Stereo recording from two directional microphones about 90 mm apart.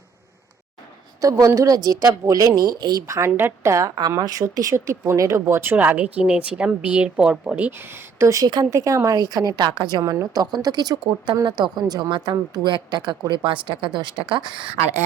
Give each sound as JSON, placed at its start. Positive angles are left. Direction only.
{"t": 1.2, "sound": "a woman's voice", "side_deg": -40}
{"t": 3.1, "sound": "a woman's voice", "side_deg": -30}
{"t": 5.7, "sound": "a woman's voice", "side_deg": -15}
{"t": 10.0, "sound": "a woman's voice", "side_deg": -40}